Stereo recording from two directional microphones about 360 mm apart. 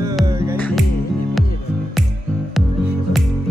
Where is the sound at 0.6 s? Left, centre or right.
Centre.